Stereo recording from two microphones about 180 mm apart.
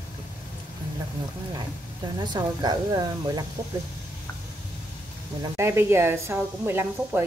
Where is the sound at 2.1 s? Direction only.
25° right (ahead or behind).